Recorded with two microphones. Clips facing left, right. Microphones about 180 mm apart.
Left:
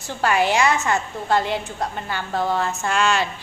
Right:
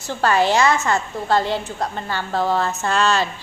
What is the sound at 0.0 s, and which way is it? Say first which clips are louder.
Speech: right 2 dB; 15° left (ahead or behind).